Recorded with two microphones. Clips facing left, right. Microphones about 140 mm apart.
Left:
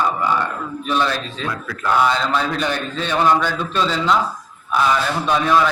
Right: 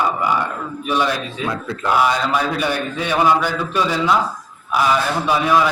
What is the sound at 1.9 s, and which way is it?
A man's voice, 10° right (ahead or behind).